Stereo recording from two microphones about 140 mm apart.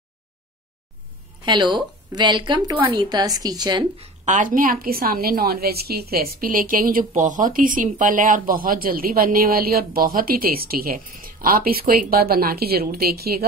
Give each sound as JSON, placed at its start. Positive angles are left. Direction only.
{"t": 1.4, "sound": "speech", "side_deg": -35}
{"t": 3.9, "sound": "a sound", "side_deg": -45}
{"t": 4.3, "sound": "a woman's voice", "side_deg": -75}